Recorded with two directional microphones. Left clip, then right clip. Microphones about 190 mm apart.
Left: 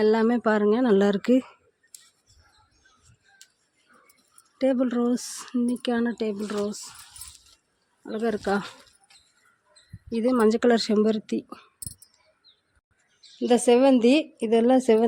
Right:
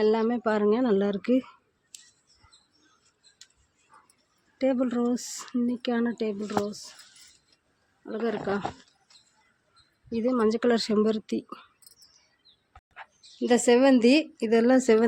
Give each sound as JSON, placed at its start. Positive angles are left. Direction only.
{"t": 0.0, "sound": "speech", "side_deg": 20}
{"t": 4.5, "sound": "speech", "side_deg": 15}
{"t": 6.7, "sound": "speech", "side_deg": 25}
{"t": 8.0, "sound": "speech", "side_deg": 10}
{"t": 10.1, "sound": "speech", "side_deg": 20}
{"t": 13.4, "sound": "speech", "side_deg": 10}